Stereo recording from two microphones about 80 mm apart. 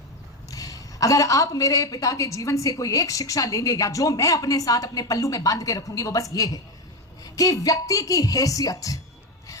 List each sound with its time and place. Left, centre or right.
0.5 s a woman's voice: left